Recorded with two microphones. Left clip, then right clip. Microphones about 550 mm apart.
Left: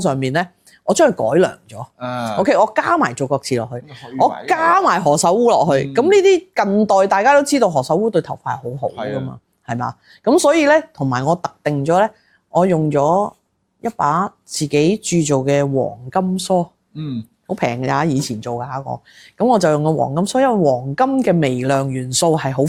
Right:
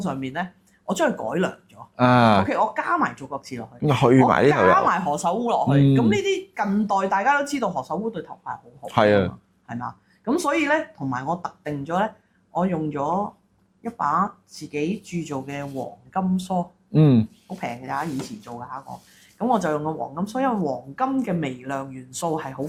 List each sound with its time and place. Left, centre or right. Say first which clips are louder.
0.0 s speech: left 10 dB; left
2.0 s speech: right 7 dB; right
2.5 s speech: left 8 dB; left
4.0 s speech: right 16 dB; right
4.7 s speech: left 5 dB; left
8.9 s speech: right 7 dB; right
9.6 s speech: left 9 dB; left
16.9 s speech: right 10 dB; centre
17.6 s speech: left 10 dB; left